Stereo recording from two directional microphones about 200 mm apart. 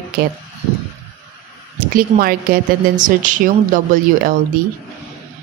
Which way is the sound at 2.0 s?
45° right (ahead or behind).